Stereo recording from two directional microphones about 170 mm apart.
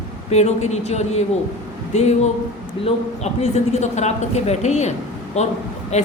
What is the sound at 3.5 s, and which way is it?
A woman's voice, 40° left (ahead or behind).